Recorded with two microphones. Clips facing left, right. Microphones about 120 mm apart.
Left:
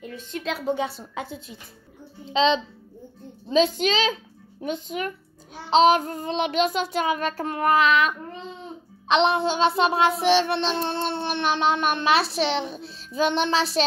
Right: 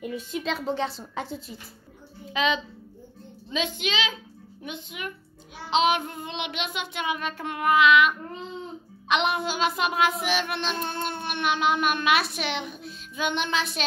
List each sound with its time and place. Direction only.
0.0 s a sound: 15° right (ahead or behind)
0.4 s a woman's voice: 5° left (ahead or behind)
2.2 s a child's voice: 25° left (ahead or behind)
5.7 s child singing: 40° left (ahead or behind)